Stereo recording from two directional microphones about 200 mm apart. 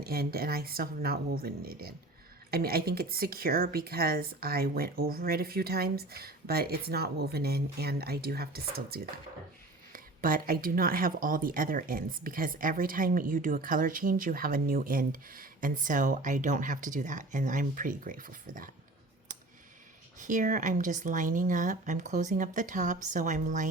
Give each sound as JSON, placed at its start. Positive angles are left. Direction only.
{"t": 0.0, "sound": "speech", "side_deg": -50}
{"t": 20.1, "sound": "speech", "side_deg": -40}